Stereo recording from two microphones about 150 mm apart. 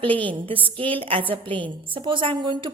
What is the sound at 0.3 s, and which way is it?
A woman's voice, 35° right (ahead or behind).